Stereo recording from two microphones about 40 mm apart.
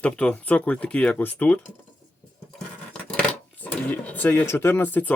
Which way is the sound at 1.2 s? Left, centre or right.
Left.